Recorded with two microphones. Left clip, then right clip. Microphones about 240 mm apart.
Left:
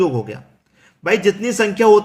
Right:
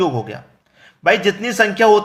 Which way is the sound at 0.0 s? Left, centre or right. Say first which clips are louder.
Even; centre.